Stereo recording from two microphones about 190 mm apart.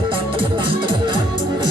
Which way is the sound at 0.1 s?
25° right (ahead or behind).